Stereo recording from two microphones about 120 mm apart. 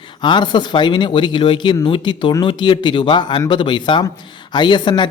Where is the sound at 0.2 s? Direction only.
40° left (ahead or behind).